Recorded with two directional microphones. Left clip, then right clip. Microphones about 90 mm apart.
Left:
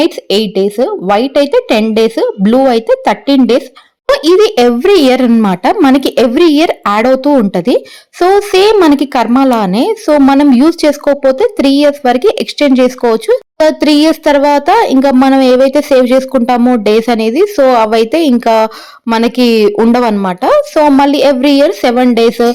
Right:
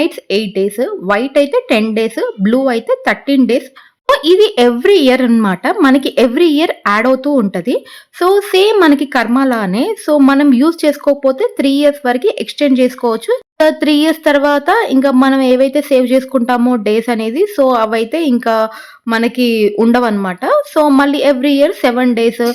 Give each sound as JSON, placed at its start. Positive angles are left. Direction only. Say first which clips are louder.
{"t": 0.0, "sound": "a woman's voice", "louder": "left 4 dB", "side_deg": 40}
{"t": 8.2, "sound": "a woman's voice", "louder": "left 3 dB", "side_deg": 35}